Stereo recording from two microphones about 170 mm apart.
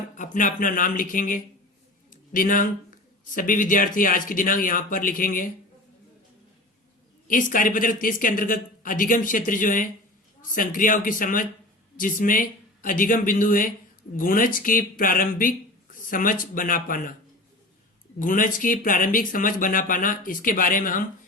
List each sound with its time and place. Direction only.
0.2 s speech: 50° left (ahead or behind)
7.3 s speech: 50° left (ahead or behind)
18.2 s speech: 50° left (ahead or behind)